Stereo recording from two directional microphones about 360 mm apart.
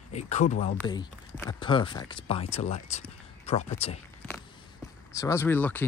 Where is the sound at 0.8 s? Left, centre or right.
Centre.